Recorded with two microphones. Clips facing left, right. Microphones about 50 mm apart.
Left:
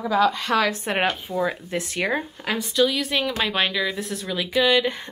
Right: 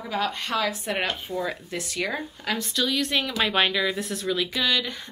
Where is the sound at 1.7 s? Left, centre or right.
Left.